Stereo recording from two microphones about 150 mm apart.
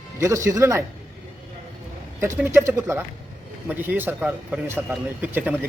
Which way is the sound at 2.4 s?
15° right (ahead or behind).